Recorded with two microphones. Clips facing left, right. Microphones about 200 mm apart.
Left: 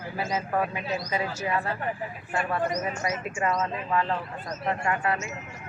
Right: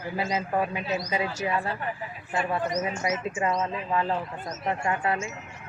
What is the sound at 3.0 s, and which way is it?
Speech, 25° right (ahead or behind).